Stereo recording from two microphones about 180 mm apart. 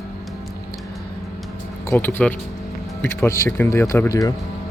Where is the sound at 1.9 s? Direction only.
10° left (ahead or behind).